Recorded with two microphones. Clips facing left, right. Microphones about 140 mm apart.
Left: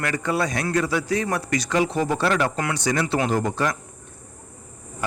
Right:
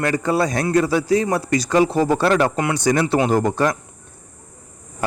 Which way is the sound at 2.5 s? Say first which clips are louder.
Right 5 dB; 20° right (ahead or behind).